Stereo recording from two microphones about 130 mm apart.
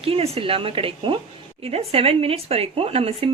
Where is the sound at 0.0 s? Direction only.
45° right (ahead or behind).